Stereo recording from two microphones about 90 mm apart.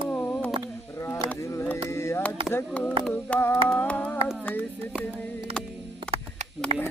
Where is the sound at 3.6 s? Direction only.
20° left (ahead or behind).